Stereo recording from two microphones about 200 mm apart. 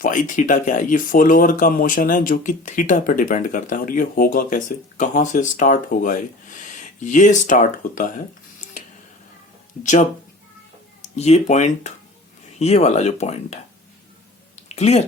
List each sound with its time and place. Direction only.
0.0 s speech: 40° left (ahead or behind)
9.8 s speech: 35° left (ahead or behind)
14.5 s a sound: 35° left (ahead or behind)